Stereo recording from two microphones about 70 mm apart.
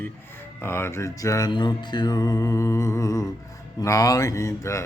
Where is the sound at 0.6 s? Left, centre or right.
Left.